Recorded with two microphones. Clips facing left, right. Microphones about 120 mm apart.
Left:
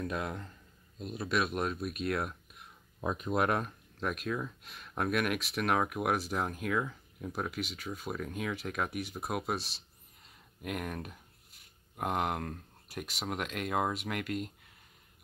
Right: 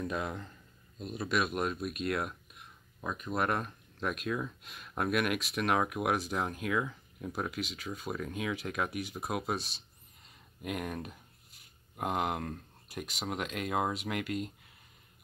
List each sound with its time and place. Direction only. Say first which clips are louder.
0.1 s speech: right 1 dB; centre (ahead or behind)
3.0 s speech: left 4 dB; 20° left (ahead or behind)
3.3 s speech: left 1 dB; 5° left (ahead or behind)